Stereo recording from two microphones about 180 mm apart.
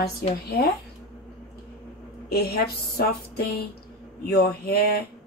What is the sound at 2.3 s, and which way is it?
A woman's voice, 60° left (ahead or behind).